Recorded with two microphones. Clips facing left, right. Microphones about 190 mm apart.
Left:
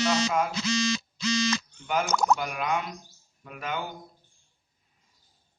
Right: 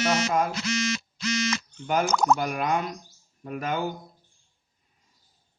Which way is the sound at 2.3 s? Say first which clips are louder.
Right 3 dB; 45° right (ahead or behind).